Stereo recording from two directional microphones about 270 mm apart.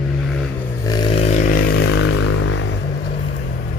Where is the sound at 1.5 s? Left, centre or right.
Left.